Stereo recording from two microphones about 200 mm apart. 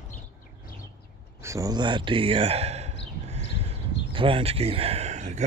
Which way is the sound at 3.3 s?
30° right (ahead or behind).